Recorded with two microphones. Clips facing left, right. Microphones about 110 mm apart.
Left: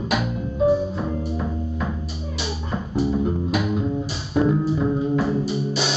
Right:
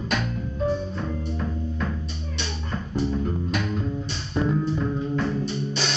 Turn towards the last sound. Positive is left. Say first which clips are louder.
# left 4 dB
turn(degrees=5)  # may be behind; listen again after turning